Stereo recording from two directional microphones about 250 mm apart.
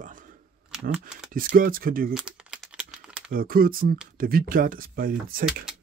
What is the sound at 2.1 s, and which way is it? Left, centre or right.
Typing, centre.